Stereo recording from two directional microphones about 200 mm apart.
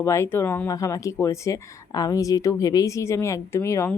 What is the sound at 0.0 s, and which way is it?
Speech, 15° left (ahead or behind).